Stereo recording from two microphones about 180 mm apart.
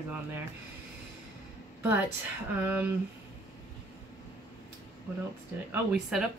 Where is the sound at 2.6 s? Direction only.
10° right (ahead or behind).